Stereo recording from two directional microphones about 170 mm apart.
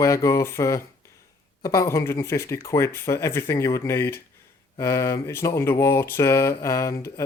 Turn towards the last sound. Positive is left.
turn(degrees=15)  # may be behind; listen again after turning